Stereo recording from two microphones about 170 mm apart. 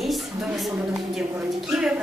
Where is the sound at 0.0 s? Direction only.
Centre (ahead or behind).